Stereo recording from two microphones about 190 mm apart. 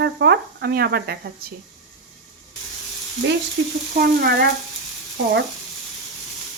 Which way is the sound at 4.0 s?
50° right (ahead or behind).